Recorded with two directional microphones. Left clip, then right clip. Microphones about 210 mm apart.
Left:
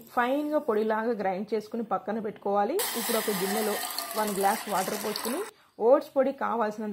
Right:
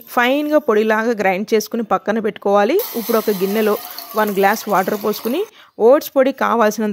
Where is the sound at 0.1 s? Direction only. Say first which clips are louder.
Right 12 dB; 30° right (ahead or behind).